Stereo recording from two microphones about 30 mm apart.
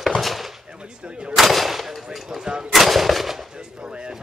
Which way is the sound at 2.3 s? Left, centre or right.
Right.